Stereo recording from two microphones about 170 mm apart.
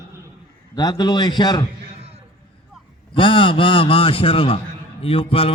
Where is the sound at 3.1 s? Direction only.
30° left (ahead or behind).